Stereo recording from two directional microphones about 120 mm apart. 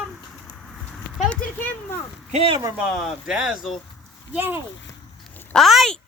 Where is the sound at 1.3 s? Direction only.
10° left (ahead or behind).